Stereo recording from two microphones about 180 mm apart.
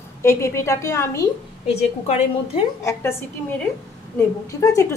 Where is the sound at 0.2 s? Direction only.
15° left (ahead or behind).